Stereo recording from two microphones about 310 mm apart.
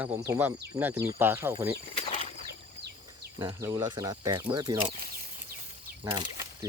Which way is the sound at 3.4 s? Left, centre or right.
Centre.